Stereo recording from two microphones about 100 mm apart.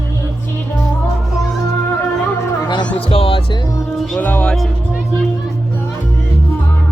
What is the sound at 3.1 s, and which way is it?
Music, 70° left (ahead or behind).